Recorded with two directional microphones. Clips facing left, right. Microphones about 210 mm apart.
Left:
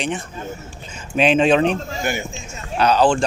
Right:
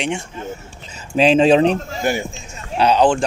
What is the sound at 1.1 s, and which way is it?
Speech, 35° right (ahead or behind).